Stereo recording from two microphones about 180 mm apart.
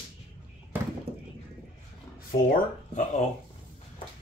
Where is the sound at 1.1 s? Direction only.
60° right (ahead or behind).